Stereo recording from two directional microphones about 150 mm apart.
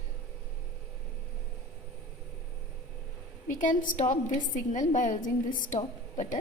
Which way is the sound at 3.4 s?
60° left (ahead or behind).